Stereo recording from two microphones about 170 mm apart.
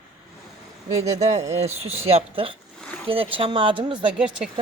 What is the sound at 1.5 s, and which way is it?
Speech, 40° right (ahead or behind).